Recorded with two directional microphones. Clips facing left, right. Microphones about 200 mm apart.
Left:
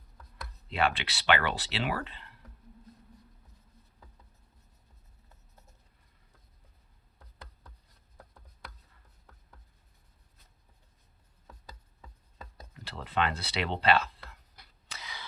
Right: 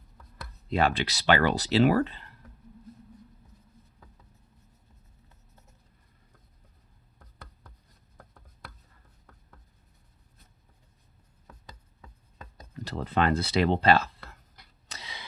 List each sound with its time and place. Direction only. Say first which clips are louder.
0.7 s speech: right 4 dB; 40° right (ahead or behind)
12.8 s speech: right 5 dB; 45° right (ahead or behind)
14.9 s a sound: right 1 dB; 30° right (ahead or behind)